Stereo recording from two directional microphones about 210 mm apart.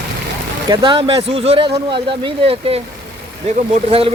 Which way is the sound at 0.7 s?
25° right (ahead or behind).